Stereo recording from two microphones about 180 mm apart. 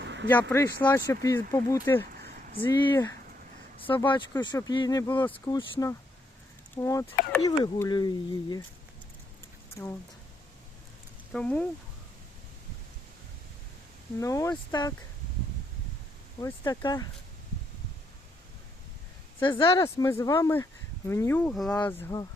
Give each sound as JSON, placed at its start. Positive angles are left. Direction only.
{"t": 0.0, "sound": "a sound", "side_deg": -80}
{"t": 0.3, "sound": "speech", "side_deg": 15}
{"t": 2.6, "sound": "speech", "side_deg": 25}
{"t": 5.3, "sound": "speech", "side_deg": 30}
{"t": 11.3, "sound": "speech", "side_deg": 5}
{"t": 14.2, "sound": "speech", "side_deg": 15}
{"t": 16.4, "sound": "speech", "side_deg": 20}
{"t": 19.4, "sound": "speech", "side_deg": 25}
{"t": 19.8, "sound": "speech", "side_deg": 15}